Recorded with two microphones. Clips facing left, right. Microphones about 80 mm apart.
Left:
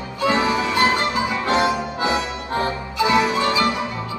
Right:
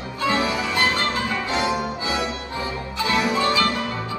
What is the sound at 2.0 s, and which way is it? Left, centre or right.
Music, left.